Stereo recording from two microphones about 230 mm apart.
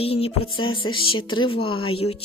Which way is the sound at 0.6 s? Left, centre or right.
Left.